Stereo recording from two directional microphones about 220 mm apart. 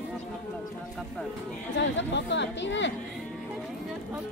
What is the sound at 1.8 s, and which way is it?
Speech, 55° left (ahead or behind).